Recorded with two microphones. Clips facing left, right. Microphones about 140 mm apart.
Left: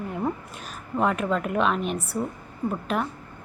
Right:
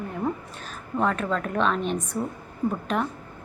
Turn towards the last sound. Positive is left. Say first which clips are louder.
# right 1 dB
turn(degrees=5)  # may be behind; listen again after turning